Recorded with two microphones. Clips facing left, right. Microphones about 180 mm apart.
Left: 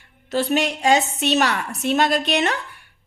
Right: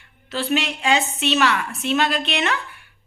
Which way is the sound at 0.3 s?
45° left (ahead or behind).